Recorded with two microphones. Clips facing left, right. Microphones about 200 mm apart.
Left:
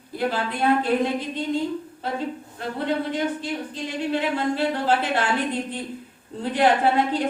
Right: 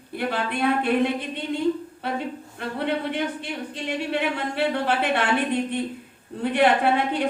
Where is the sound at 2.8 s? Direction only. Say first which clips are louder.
Left 1 dB; 65° right (ahead or behind).